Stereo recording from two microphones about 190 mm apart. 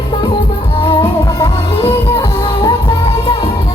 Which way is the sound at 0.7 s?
25° left (ahead or behind).